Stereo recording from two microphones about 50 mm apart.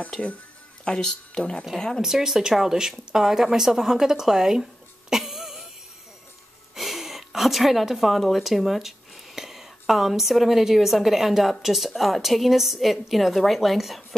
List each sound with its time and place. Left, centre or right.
0.9 s speech: centre
2.0 s speech: centre
5.1 s throat clearing: centre
6.7 s a woman's voice: centre